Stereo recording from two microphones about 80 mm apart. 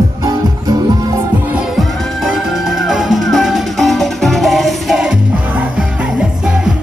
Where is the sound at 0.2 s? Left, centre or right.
Right.